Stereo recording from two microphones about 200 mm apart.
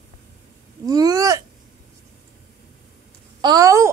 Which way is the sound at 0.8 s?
20° right (ahead or behind).